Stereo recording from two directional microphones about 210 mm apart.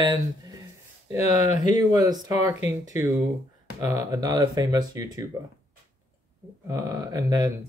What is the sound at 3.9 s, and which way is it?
Speech, 15° right (ahead or behind).